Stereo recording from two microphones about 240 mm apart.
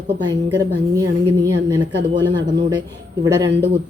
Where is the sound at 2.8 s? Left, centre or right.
Centre.